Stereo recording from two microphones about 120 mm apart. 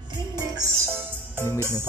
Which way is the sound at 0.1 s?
30° right (ahead or behind).